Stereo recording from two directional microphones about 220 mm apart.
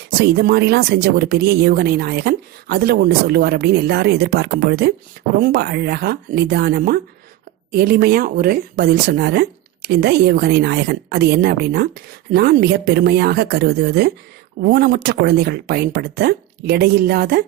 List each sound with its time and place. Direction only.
0.3 s speech: 45° right (ahead or behind)